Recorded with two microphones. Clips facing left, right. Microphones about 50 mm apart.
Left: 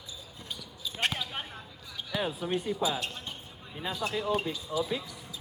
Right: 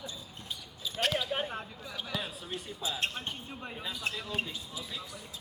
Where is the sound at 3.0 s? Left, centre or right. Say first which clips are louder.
Right 2 dB; right.